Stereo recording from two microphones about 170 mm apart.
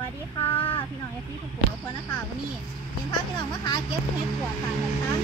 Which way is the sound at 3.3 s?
25° left (ahead or behind).